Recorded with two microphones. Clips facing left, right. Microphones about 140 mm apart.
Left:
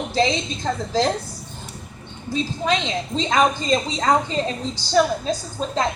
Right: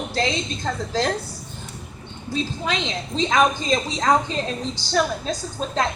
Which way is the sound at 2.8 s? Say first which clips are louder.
Left 1 dB; 10° left (ahead or behind).